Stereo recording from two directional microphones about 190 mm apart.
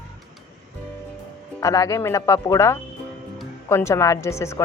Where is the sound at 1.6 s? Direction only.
15° left (ahead or behind).